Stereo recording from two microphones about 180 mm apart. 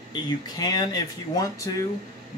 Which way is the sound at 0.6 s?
20° left (ahead or behind).